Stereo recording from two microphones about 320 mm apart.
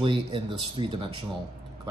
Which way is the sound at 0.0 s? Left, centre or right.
Centre.